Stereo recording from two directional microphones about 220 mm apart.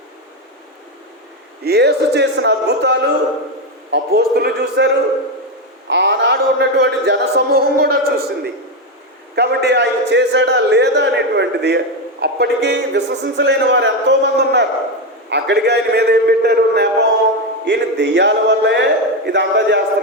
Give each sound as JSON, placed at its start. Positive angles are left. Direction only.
{"t": 1.6, "sound": "a man's voice", "side_deg": -50}
{"t": 9.3, "sound": "a man's voice", "side_deg": -50}